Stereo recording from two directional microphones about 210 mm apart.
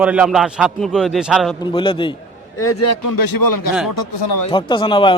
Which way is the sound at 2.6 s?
90° left.